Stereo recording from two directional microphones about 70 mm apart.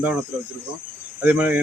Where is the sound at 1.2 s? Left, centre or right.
Right.